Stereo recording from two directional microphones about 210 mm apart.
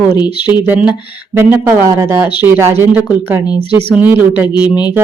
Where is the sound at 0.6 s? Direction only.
5° right (ahead or behind).